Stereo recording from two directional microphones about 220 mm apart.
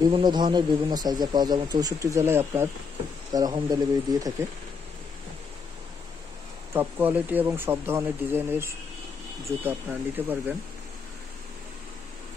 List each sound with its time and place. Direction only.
0.0 s speech: 20° right (ahead or behind)
6.7 s speech: 10° right (ahead or behind)